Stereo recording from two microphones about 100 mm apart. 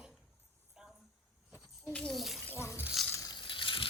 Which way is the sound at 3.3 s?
55° left (ahead or behind).